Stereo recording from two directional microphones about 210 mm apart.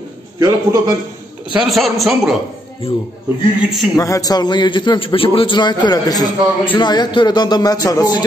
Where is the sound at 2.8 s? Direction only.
25° left (ahead or behind).